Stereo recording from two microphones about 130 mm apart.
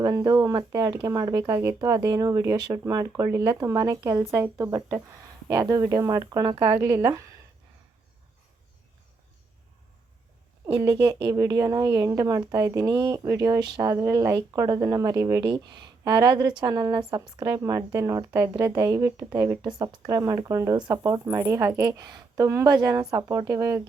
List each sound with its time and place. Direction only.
0.0 s speech: 25° right (ahead or behind)
11.0 s speech: 40° right (ahead or behind)
21.4 s speech: 20° right (ahead or behind)
21.8 s speech: 30° right (ahead or behind)